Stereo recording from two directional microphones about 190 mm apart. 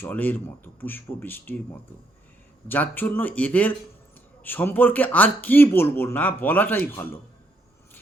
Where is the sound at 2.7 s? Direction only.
10° left (ahead or behind).